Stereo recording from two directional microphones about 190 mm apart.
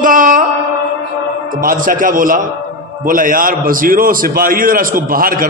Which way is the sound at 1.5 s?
45° right (ahead or behind).